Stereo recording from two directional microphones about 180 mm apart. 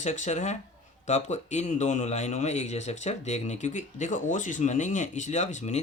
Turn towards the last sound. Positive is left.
turn(degrees=40)  # may be behind; listen again after turning